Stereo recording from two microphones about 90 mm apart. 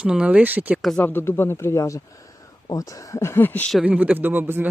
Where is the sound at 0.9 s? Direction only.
25° left (ahead or behind).